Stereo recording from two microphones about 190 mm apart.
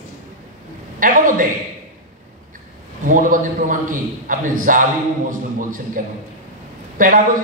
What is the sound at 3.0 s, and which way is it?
A man's voice, 45° right (ahead or behind).